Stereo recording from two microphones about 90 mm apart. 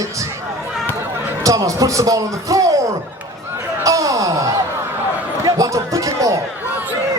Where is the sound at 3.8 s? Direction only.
40° right (ahead or behind).